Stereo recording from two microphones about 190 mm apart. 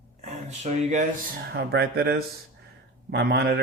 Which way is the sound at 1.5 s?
60° right (ahead or behind).